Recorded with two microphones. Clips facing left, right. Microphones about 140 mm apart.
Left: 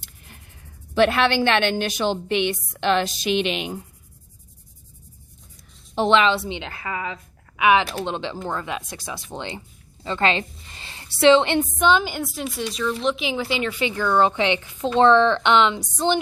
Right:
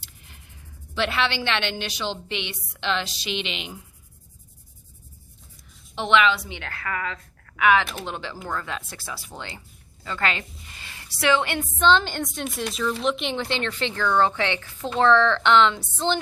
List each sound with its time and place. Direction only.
0.9 s a woman's voice: 50° left (ahead or behind)
5.9 s a woman's voice: 35° left (ahead or behind); by 16.1 s 15° left (ahead or behind)